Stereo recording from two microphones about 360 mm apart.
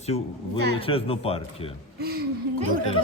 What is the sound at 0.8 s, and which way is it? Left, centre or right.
Speech, centre.